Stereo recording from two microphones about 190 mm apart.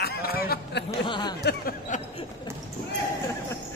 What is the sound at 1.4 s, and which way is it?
Speech, 50° left (ahead or behind).